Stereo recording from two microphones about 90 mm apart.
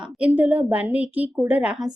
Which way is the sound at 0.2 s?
20° right (ahead or behind).